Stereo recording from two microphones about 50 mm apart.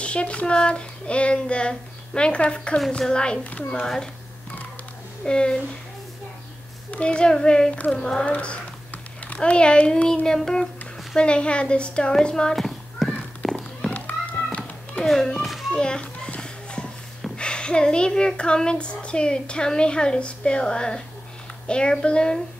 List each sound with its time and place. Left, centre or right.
0.0 s a child's voice: left
3.8 s a woman's voice: centre
5.2 s a woman's voice: centre
6.9 s a woman's voice: left
7.7 s speech: left
8.0 s a woman's voice: centre
8.3 s a sound: left
10.2 s a woman's voice: centre
11.1 s a child's voice: left
12.5 s horse: centre
13.9 s music: left
15.0 s speech: left
15.7 s a child's voice: centre
17.4 s a child's voice: centre